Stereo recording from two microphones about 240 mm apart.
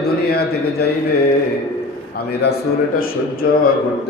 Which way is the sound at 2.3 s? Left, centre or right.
Left.